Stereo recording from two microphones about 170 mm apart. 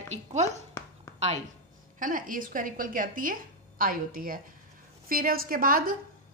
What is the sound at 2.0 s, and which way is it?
A woman's voice, 55° right (ahead or behind).